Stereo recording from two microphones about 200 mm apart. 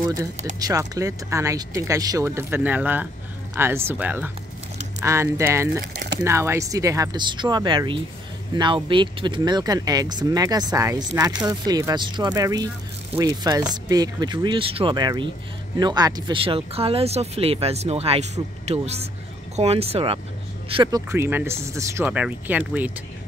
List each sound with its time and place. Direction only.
0.0 s speech: 20° right (ahead or behind)